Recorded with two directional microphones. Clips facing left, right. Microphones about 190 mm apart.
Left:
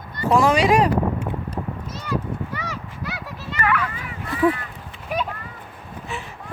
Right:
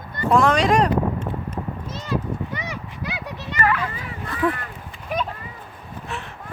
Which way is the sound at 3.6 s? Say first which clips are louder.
Even; 30° right (ahead or behind).